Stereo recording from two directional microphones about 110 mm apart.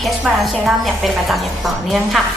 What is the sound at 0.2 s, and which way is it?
A woman's voice, centre (ahead or behind).